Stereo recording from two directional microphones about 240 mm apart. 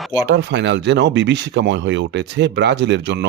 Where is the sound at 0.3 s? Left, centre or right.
Right.